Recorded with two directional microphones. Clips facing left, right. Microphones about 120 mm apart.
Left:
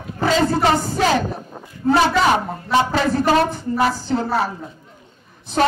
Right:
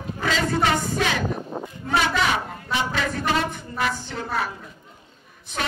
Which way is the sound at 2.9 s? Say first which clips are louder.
Left 7 dB; 35° left (ahead or behind).